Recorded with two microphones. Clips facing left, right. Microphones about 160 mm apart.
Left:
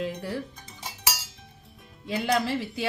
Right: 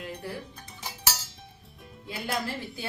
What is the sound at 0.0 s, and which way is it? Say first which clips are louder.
Music: left 6 dB; 90° left.